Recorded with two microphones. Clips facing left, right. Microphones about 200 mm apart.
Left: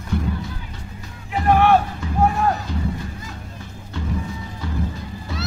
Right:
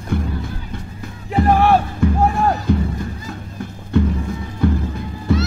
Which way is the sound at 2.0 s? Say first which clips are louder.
Right 11 dB; 55° right (ahead or behind).